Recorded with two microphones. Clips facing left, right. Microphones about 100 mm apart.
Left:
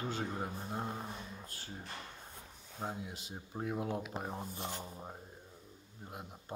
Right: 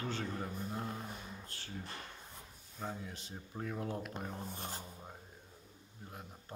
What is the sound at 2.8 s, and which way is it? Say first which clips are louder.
Speech: left 2 dB; 15° left (ahead or behind).